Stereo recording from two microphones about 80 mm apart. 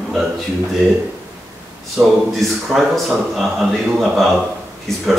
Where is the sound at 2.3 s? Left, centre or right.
Centre.